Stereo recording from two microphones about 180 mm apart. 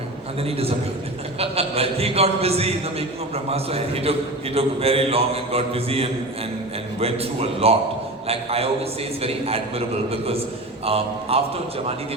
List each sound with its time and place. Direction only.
0.4 s a man's voice: 35° right (ahead or behind)